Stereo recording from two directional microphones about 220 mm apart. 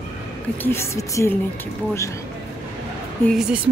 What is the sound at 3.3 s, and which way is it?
Speech, centre (ahead or behind).